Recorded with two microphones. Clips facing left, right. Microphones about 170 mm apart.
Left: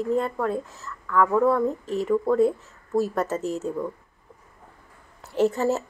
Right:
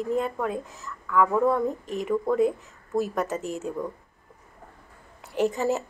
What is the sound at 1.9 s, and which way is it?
A woman's voice, 15° right (ahead or behind).